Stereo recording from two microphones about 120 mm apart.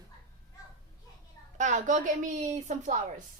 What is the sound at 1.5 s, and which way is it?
A woman's voice, 85° right.